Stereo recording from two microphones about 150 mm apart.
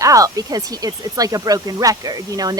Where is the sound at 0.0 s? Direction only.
20° right (ahead or behind).